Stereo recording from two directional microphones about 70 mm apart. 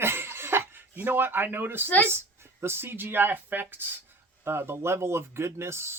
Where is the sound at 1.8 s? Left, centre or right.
Left.